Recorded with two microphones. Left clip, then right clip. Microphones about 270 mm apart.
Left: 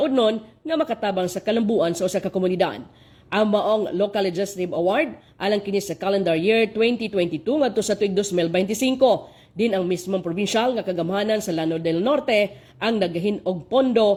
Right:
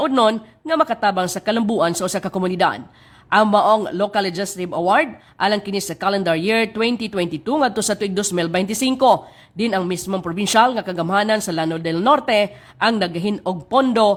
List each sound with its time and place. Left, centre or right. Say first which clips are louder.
0.0 s a woman's voice: right 3 dB; right